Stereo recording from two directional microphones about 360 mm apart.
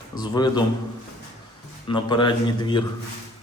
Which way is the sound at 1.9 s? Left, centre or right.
Centre.